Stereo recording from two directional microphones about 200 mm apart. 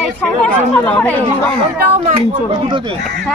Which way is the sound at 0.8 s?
5° left (ahead or behind).